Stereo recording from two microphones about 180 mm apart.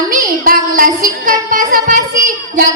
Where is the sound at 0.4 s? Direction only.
50° right (ahead or behind).